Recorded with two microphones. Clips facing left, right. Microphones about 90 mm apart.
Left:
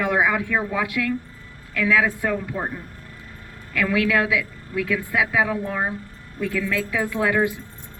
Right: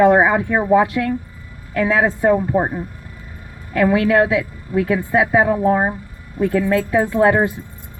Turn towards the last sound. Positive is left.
turn(degrees=-35)  # may be behind; listen again after turning